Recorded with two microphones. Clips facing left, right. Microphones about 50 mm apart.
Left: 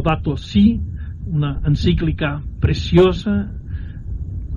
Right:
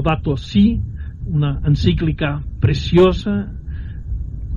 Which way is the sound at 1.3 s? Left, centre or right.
Right.